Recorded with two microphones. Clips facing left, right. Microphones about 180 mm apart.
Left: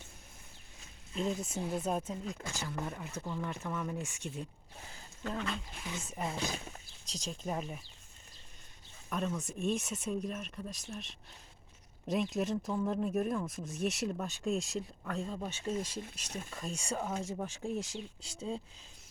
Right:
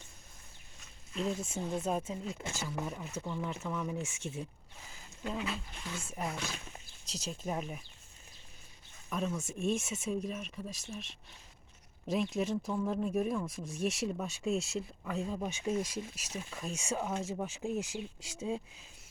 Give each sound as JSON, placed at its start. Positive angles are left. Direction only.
{"t": 1.1, "sound": "speech", "side_deg": 0}
{"t": 5.2, "sound": "speech", "side_deg": -5}
{"t": 6.2, "sound": "speech", "side_deg": 30}
{"t": 7.1, "sound": "speech", "side_deg": -5}
{"t": 9.0, "sound": "speech", "side_deg": 0}